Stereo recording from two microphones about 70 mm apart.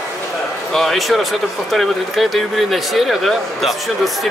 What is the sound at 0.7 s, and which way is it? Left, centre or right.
Speech, centre.